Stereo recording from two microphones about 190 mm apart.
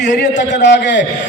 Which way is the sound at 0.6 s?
70° left (ahead or behind).